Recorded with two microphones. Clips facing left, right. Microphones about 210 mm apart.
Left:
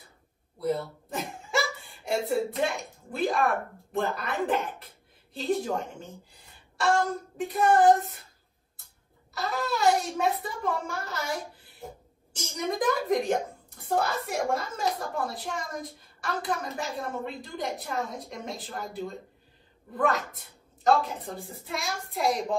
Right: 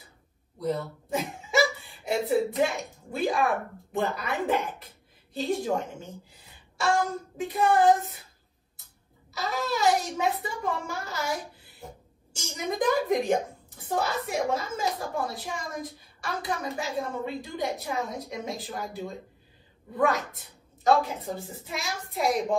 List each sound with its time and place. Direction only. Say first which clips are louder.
0.6 s a woman's voice: left 1 dB; centre (ahead or behind)
9.4 s a child's voice: even; centre (ahead or behind)
12.4 s a child's voice: even; centre (ahead or behind)